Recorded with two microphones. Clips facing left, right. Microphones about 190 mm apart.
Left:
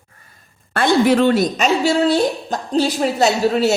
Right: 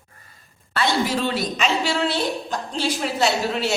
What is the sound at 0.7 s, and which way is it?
A woman's voice, 55° left (ahead or behind).